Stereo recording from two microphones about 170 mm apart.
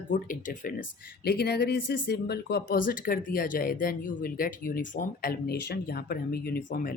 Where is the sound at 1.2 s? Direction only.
65° left (ahead or behind).